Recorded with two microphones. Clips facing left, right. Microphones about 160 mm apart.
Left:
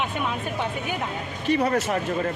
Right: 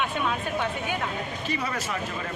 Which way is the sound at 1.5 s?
55° left (ahead or behind).